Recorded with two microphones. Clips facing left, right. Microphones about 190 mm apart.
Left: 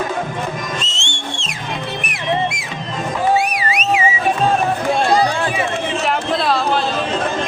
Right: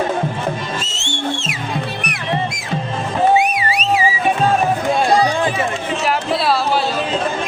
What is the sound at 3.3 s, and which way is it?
Music, 20° right (ahead or behind).